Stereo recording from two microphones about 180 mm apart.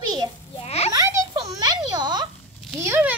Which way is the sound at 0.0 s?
20° right (ahead or behind).